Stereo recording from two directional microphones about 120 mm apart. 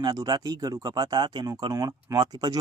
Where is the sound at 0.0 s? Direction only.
35° right (ahead or behind).